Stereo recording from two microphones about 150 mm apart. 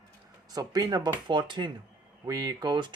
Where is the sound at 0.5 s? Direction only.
25° right (ahead or behind).